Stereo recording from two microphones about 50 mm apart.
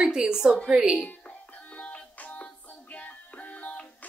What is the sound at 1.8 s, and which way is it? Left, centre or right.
Music, left.